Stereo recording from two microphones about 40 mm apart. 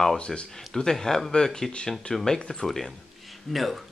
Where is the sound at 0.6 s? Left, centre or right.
Centre.